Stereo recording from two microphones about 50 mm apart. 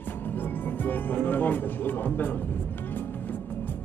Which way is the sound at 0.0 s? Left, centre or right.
Left.